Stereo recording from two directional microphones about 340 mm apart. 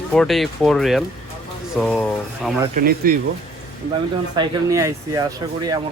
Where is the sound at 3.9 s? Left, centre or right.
Centre.